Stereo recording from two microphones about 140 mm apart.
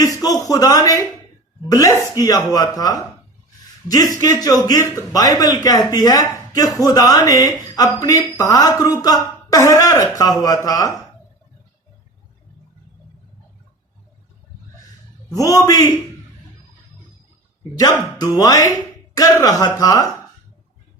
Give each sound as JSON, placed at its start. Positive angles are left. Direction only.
{"t": 0.0, "sound": "speech", "side_deg": 25}
{"t": 15.3, "sound": "speech", "side_deg": 25}
{"t": 17.7, "sound": "speech", "side_deg": 25}